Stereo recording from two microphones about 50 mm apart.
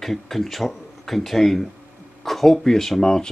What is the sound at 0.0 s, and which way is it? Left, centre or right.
Speech, centre.